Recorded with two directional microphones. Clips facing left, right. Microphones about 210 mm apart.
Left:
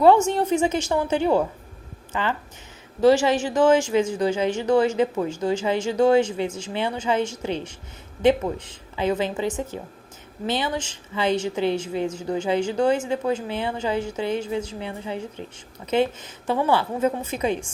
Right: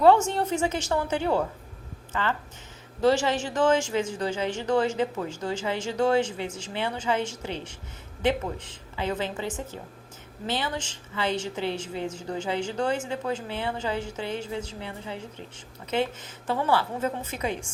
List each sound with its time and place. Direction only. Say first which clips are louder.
0.0 s a woman's voice: left 3 dB; 15° left (ahead or behind)
3.0 s a woman's voice: left 5 dB; 10° left (ahead or behind)
9.0 s a woman's voice: left 6 dB; 15° left (ahead or behind)
16.5 s a woman's voice: left 4 dB; 15° left (ahead or behind)